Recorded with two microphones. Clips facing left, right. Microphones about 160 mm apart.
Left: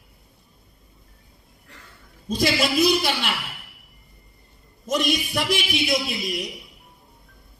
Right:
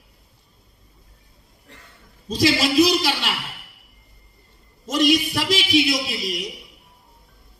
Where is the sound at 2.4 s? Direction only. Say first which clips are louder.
Right 3 dB; 55° left (ahead or behind).